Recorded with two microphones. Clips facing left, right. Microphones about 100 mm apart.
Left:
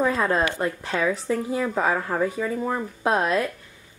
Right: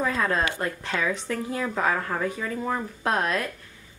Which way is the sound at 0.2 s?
10° left (ahead or behind).